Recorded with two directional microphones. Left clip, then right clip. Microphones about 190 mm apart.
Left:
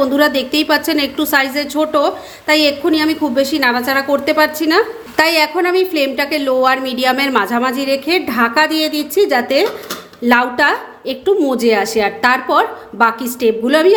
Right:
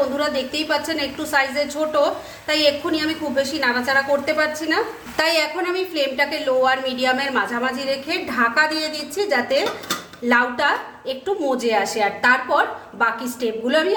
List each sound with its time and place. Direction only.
0.2 s a woman's voice: 50° left (ahead or behind)